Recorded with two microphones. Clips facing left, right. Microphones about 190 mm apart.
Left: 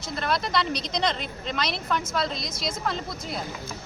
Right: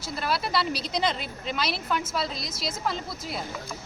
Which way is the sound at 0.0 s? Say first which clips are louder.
Left 1 dB; 5° right (ahead or behind).